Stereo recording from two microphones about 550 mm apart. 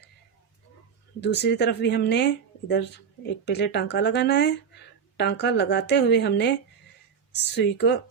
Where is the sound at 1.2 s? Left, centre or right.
Centre.